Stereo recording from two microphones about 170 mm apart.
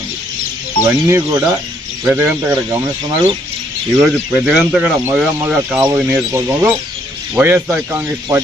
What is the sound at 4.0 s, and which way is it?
Speech, 5° right (ahead or behind).